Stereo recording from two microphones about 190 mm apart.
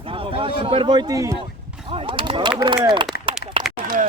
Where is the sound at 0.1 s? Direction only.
30° right (ahead or behind).